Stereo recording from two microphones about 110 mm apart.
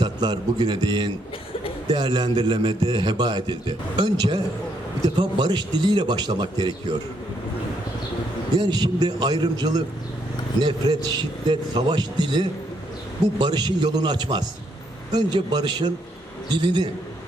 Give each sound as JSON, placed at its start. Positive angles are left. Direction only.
{"t": 0.0, "sound": "a man's voice", "side_deg": -40}
{"t": 8.5, "sound": "a man's voice", "side_deg": -40}